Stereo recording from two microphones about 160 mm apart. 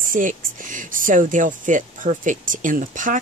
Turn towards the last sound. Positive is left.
turn(degrees=-55)  # may be behind; listen again after turning